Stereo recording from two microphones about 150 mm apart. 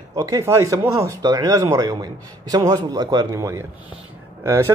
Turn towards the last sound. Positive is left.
turn(degrees=-20)  # may be behind; listen again after turning